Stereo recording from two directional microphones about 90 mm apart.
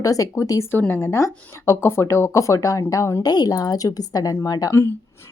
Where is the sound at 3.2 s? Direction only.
50° left (ahead or behind).